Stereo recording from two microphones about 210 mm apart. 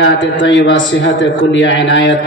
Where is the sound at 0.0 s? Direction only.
60° left (ahead or behind).